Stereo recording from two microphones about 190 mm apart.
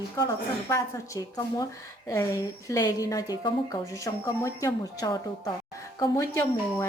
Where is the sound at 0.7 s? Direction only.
15° left (ahead or behind).